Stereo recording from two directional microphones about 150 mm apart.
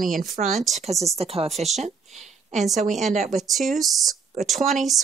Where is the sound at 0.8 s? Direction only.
45° right (ahead or behind).